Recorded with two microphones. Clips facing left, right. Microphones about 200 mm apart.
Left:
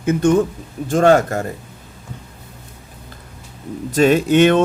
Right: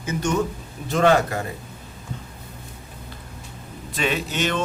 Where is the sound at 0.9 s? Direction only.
45° left (ahead or behind).